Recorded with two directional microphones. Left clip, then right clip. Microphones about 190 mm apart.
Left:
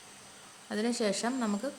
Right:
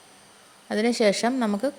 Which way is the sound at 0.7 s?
40° right (ahead or behind).